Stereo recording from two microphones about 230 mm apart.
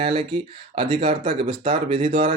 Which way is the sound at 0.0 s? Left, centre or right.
Right.